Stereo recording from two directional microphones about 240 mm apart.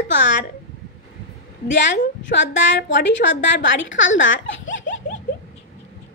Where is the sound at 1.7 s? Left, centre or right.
Left.